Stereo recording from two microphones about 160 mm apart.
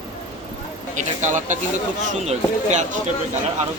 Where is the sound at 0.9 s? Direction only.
50° right (ahead or behind).